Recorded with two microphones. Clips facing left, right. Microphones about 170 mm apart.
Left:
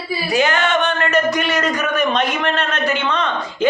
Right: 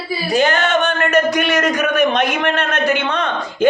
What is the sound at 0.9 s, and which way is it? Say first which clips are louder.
Speech: right 2 dB; 50° right (ahead or behind).